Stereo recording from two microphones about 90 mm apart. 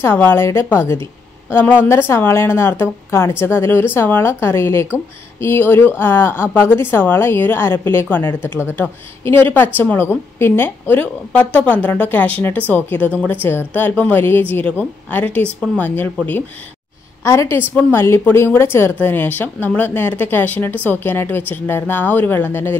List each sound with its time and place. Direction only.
0.0 s speech: 25° left (ahead or behind)
17.2 s speech: 30° left (ahead or behind)